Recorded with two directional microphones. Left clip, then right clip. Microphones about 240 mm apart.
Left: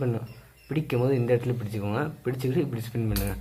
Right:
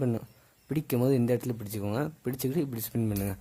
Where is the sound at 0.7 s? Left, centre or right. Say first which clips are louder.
Left 2 dB; right.